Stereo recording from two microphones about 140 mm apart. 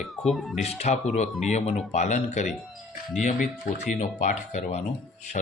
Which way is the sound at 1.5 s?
45° left (ahead or behind).